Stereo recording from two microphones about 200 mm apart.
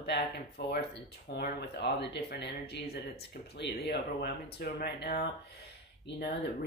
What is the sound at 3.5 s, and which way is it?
Speech, 55° left (ahead or behind).